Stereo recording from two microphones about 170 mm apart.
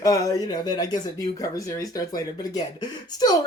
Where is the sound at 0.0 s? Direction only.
20° left (ahead or behind).